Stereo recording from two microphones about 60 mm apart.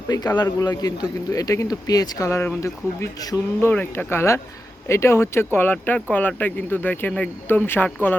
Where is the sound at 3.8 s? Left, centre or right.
Left.